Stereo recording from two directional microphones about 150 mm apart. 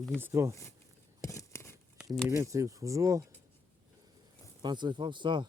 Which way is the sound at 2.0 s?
20° right (ahead or behind).